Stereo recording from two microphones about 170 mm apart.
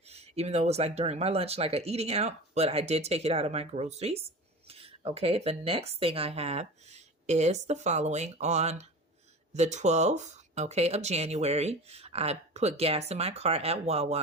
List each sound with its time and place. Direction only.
0.1 s speech: 40° right (ahead or behind)